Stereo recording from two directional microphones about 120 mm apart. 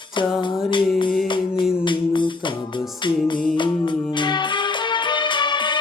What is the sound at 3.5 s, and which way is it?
Music, 40° left (ahead or behind).